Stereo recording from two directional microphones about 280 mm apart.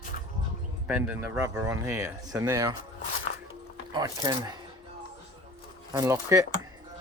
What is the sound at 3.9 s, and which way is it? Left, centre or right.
Speech, centre.